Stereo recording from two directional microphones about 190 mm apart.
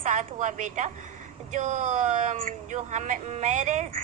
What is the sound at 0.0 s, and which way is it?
A woman's voice, 40° right (ahead or behind).